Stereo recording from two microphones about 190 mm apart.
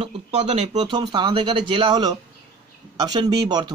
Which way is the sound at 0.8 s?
20° right (ahead or behind).